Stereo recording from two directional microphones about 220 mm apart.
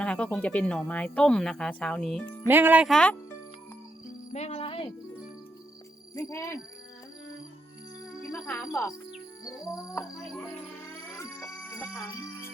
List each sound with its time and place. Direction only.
0.0 s speech: 5° left (ahead or behind)
2.5 s speech: 10° right (ahead or behind)
4.3 s music: 30° left (ahead or behind)
6.1 s speech: 15° left (ahead or behind)
8.3 s speech: 15° left (ahead or behind)
11.2 s music: 10° left (ahead or behind)